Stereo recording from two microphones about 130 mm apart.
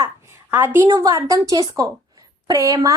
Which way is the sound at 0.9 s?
25° right (ahead or behind).